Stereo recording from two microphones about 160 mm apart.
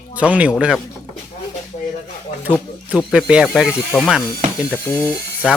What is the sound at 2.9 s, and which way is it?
Speech, 5° right (ahead or behind).